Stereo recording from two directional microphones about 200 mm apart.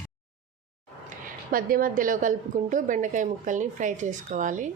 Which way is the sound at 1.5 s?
45° right (ahead or behind).